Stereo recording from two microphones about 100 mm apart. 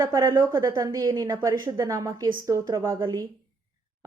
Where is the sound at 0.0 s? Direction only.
35° right (ahead or behind).